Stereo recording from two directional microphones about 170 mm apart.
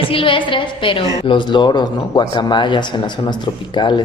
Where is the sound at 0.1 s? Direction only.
30° left (ahead or behind).